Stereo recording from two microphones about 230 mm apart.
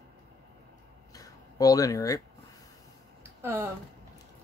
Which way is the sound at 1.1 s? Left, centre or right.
Centre.